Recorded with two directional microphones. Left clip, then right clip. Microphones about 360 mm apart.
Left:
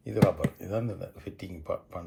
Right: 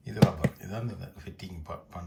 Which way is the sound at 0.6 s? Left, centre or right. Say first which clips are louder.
Left 7 dB; centre.